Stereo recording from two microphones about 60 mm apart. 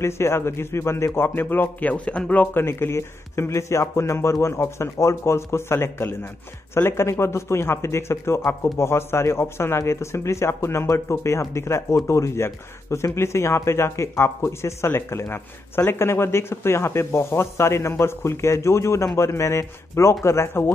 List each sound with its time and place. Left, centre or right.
0.0 s speech: left
2.4 s speech: left